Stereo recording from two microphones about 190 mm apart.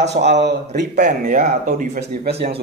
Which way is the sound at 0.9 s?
45° right (ahead or behind).